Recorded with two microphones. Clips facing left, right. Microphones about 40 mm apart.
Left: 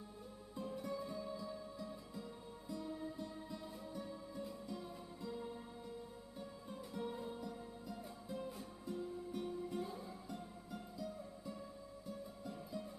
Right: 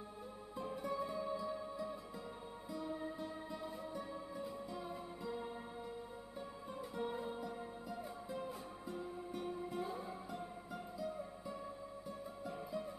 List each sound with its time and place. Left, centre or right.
0.7 s music: centre
6.7 s music: centre